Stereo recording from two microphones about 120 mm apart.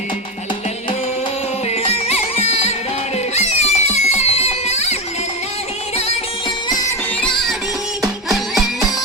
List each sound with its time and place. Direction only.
1.7 s music: 60° left (ahead or behind)
6.7 s music: 35° left (ahead or behind)
7.2 s music: 5° left (ahead or behind)